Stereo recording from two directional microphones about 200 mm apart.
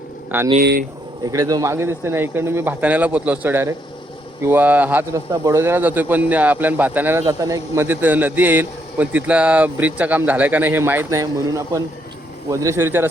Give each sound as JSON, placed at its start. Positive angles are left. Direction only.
{"t": 0.6, "sound": "speech", "side_deg": -55}
{"t": 1.2, "sound": "speech", "side_deg": -15}